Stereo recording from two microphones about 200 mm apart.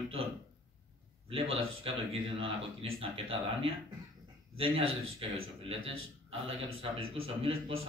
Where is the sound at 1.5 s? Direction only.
85° right.